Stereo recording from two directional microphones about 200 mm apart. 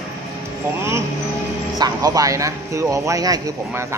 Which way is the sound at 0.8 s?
15° right (ahead or behind).